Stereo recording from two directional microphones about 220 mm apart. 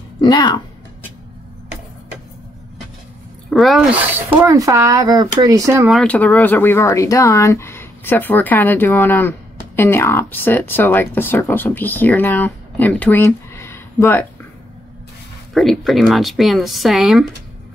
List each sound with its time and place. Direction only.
0.2 s speech: 20° left (ahead or behind)
3.4 s speech: centre (ahead or behind)
5.9 s speech: 5° left (ahead or behind)
15.5 s speech: centre (ahead or behind)